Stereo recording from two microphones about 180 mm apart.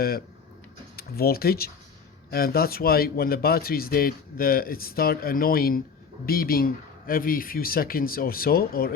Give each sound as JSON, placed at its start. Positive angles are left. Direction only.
{"t": 0.9, "sound": "speech", "side_deg": 60}